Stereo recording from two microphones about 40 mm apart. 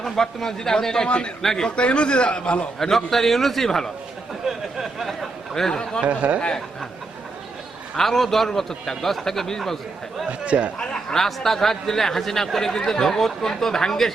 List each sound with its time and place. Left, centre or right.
0.0 s a man's voice: centre
1.0 s speech: left
1.4 s a man's voice: centre
1.6 s speech: left
2.7 s a man's voice: centre
4.4 s speech: centre
5.7 s speech: centre
6.1 s speech: right
7.9 s a man's voice: centre
10.4 s speech: right
10.8 s a man's voice: centre